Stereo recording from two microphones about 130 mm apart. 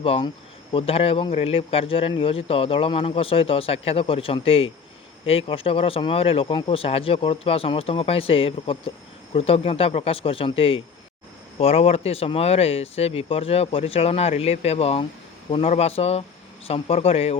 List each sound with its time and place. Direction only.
0.0 s speech: 45° left (ahead or behind)